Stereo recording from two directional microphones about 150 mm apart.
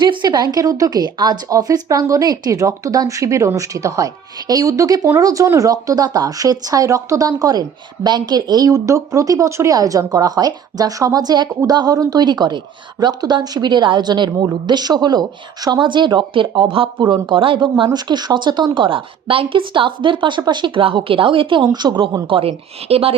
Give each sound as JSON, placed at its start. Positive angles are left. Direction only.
{"t": 0.0, "sound": "speech", "side_deg": -30}